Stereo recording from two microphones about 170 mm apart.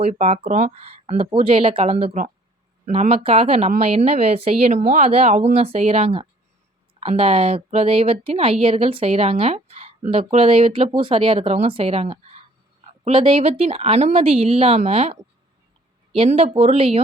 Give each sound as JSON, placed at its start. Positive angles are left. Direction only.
{"t": 0.0, "sound": "speech", "side_deg": -45}